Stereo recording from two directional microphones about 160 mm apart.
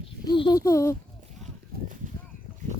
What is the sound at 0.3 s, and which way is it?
Speech, 30° left (ahead or behind).